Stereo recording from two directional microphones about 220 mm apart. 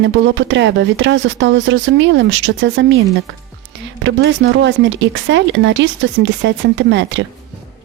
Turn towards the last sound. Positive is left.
turn(degrees=-55)  # may be behind; listen again after turning